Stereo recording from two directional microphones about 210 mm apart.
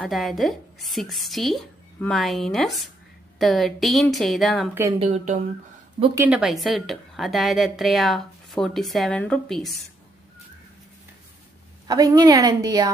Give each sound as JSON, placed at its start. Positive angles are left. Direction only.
{"t": 0.0, "sound": "a woman's voice", "side_deg": 0}
{"t": 4.9, "sound": "speech", "side_deg": -30}
{"t": 6.1, "sound": "a woman's voice", "side_deg": -5}
{"t": 11.9, "sound": "a woman's voice", "side_deg": -15}